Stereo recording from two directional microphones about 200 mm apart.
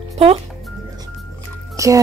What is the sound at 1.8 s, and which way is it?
Music, 15° right (ahead or behind).